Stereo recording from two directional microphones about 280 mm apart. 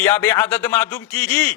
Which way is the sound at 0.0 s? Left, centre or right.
Centre.